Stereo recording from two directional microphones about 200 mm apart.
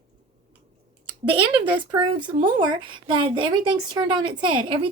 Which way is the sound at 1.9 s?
25° right (ahead or behind).